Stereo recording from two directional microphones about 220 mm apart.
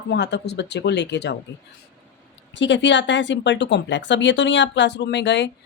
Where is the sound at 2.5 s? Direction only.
55° left (ahead or behind).